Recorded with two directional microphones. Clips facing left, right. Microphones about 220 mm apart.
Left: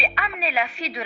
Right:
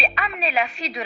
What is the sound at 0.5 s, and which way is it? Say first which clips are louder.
Speech: right 2 dB; 40° right (ahead or behind).